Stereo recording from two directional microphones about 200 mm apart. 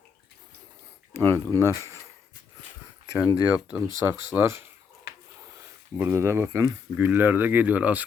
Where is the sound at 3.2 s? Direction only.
15° left (ahead or behind).